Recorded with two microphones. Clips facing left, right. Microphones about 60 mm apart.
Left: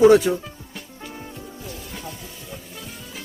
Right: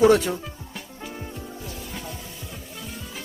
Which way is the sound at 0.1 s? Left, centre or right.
Centre.